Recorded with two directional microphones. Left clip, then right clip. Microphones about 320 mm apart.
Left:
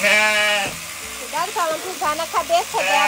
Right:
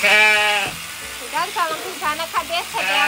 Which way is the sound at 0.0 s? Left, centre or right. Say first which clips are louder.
Right 2 dB; centre.